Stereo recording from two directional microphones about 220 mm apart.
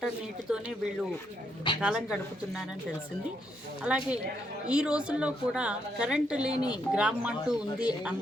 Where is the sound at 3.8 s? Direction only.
5° right (ahead or behind).